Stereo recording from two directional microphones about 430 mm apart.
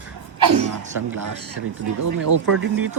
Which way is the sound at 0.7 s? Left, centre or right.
Right.